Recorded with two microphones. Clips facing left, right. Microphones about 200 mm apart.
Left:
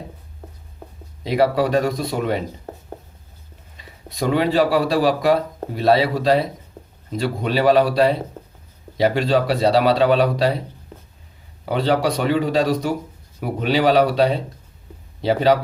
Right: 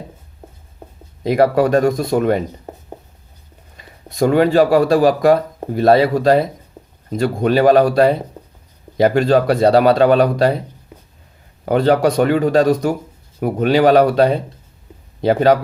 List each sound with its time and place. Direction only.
1.2 s speech: 50° right (ahead or behind)
3.8 s speech: 50° right (ahead or behind)
11.6 s speech: 50° right (ahead or behind)